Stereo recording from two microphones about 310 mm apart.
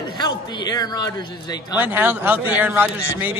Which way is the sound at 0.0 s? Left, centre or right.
Centre.